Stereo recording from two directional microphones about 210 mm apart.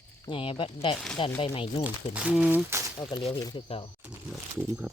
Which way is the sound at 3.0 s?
20° left (ahead or behind).